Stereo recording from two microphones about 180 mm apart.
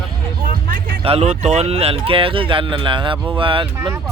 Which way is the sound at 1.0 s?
35° right (ahead or behind).